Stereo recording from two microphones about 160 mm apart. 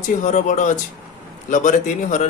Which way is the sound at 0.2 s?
50° left (ahead or behind).